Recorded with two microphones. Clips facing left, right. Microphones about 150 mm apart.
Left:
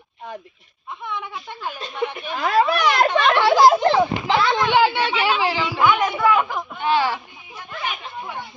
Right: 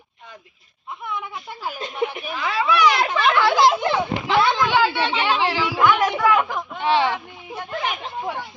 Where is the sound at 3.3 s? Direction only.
30° left (ahead or behind).